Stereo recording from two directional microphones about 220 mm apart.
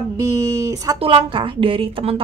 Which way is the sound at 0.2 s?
15° right (ahead or behind).